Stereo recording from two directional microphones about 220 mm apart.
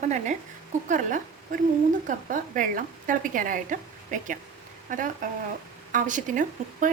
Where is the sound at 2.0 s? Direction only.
35° right (ahead or behind).